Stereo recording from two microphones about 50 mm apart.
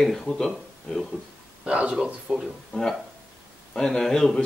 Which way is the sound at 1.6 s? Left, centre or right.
Right.